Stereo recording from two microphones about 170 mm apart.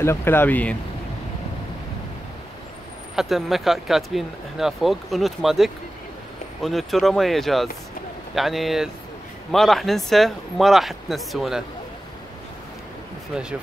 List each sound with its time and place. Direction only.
0.0 s speech: 15° left (ahead or behind)
3.2 s speech: centre (ahead or behind)
13.3 s speech: 5° right (ahead or behind)